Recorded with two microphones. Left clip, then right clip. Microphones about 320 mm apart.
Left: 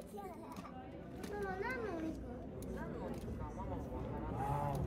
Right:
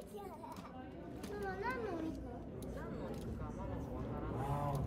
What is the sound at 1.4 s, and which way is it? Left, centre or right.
Speech, centre.